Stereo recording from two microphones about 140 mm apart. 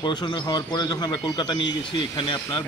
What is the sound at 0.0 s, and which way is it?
A man's voice, 30° left (ahead or behind).